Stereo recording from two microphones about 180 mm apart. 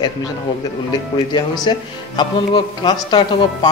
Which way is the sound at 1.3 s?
25° left (ahead or behind).